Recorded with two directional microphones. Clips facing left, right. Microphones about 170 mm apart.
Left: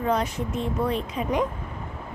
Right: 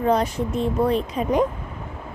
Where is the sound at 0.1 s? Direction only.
35° right (ahead or behind).